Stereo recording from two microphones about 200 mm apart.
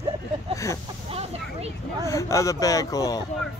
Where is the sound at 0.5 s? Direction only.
15° left (ahead or behind).